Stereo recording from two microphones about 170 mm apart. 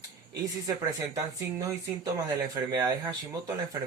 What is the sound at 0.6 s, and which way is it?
Speech, 20° right (ahead or behind).